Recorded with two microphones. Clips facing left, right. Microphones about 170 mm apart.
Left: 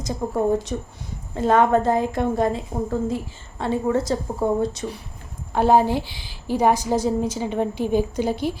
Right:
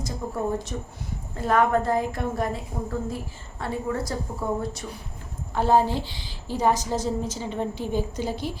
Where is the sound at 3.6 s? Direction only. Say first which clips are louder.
Left 7 dB; 20° left (ahead or behind).